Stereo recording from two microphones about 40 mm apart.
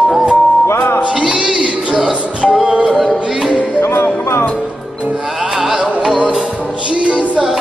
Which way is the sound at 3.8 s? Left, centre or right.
Left.